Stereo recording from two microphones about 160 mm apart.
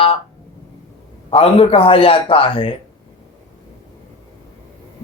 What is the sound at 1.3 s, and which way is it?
Speech, 35° left (ahead or behind).